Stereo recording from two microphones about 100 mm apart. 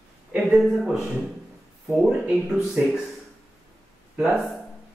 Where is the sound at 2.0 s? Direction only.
15° right (ahead or behind).